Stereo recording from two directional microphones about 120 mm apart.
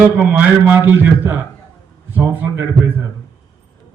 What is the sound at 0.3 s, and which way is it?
A man's voice, 15° right (ahead or behind).